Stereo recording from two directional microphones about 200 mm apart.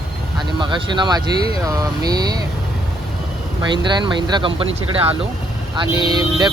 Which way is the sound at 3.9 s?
20° right (ahead or behind).